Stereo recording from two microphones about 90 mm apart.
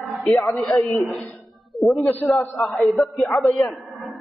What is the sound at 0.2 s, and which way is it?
Speech, centre (ahead or behind).